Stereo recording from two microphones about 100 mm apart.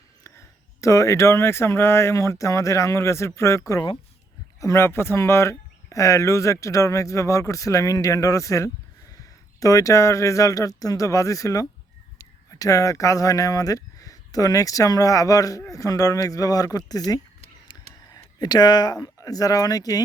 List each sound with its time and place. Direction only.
0.3 s speech: 30° left (ahead or behind)
4.6 s speech: 30° left (ahead or behind)